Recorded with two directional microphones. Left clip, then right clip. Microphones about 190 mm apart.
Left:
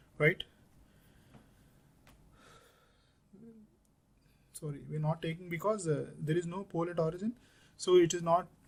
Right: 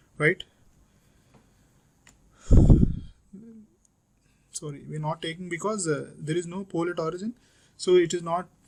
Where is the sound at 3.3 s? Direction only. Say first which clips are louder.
Right 8 dB; 25° right (ahead or behind).